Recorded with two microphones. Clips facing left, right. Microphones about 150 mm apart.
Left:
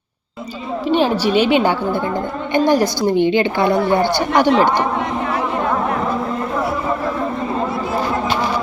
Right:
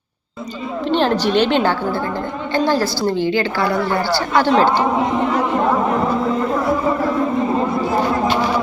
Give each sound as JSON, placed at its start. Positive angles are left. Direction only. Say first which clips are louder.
{"t": 0.9, "sound": "a woman's voice", "louder": "left 1 dB", "side_deg": 10}